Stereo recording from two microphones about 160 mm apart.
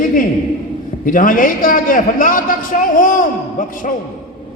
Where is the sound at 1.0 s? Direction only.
60° left (ahead or behind).